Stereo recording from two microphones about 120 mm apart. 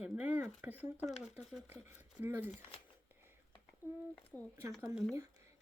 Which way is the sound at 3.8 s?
15° right (ahead or behind).